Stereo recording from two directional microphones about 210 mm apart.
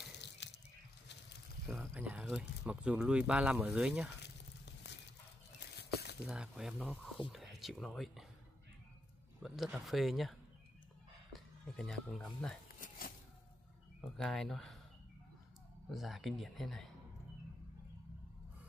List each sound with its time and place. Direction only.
1.7 s speech: 10° right (ahead or behind)
5.8 s a sound: 50° left (ahead or behind)
6.2 s speech: 5° right (ahead or behind)
9.4 s speech: centre (ahead or behind)
11.3 s speech: centre (ahead or behind)
14.1 s speech: centre (ahead or behind)
15.9 s speech: centre (ahead or behind)